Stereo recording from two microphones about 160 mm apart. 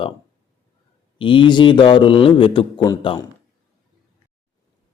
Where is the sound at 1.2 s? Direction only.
30° left (ahead or behind).